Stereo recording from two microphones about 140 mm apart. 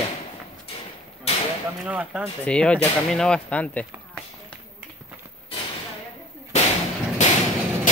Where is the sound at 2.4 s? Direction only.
10° left (ahead or behind).